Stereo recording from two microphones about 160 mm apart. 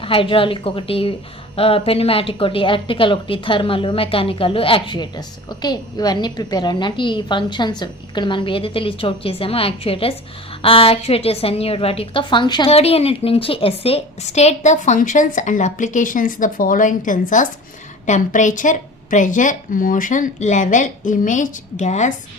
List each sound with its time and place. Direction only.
0.0 s a woman's voice: 35° left (ahead or behind)
12.7 s a woman's voice: 40° left (ahead or behind)